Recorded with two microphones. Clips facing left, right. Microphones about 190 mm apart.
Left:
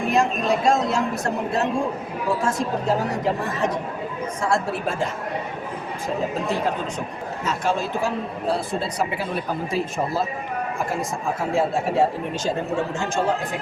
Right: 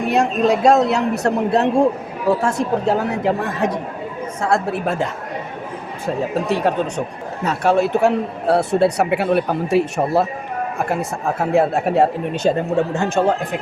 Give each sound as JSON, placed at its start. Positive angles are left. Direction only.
{"t": 0.1, "sound": "a man's voice", "side_deg": -70}
{"t": 6.5, "sound": "a man's voice", "side_deg": -70}